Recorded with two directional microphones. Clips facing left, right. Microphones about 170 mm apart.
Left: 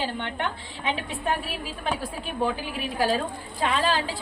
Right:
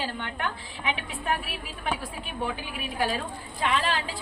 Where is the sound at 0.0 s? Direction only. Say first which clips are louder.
Left 3 dB; 25° left (ahead or behind).